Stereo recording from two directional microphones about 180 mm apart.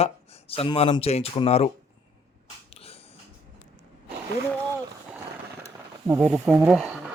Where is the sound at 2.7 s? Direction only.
35° left (ahead or behind).